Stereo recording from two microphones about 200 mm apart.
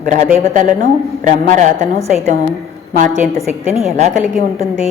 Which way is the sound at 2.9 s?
40° right (ahead or behind).